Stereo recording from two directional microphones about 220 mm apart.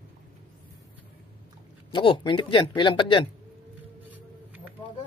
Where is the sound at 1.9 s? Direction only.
20° left (ahead or behind).